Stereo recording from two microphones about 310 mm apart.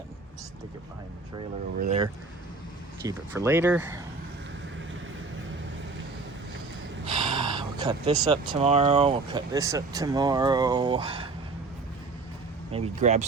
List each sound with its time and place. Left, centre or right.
1.8 s speech: right
3.0 s speech: centre
7.0 s speech: centre
12.7 s speech: centre